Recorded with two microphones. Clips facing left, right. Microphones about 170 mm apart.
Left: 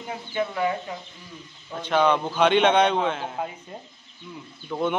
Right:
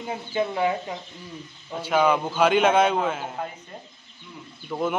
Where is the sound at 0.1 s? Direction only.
25° right (ahead or behind).